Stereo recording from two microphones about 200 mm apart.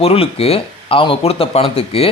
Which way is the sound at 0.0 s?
30° left (ahead or behind).